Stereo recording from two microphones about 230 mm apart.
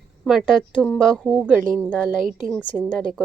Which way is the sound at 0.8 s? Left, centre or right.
Centre.